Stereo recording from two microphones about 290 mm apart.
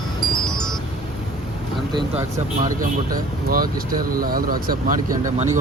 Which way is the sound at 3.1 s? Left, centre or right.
Right.